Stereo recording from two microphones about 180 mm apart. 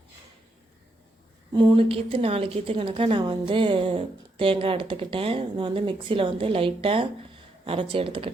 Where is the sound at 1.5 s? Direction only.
25° right (ahead or behind).